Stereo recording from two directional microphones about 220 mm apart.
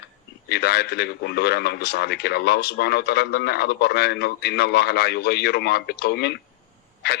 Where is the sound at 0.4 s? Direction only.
45° left (ahead or behind).